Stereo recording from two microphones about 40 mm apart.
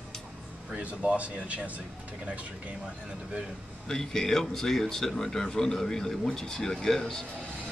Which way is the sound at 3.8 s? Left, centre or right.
Centre.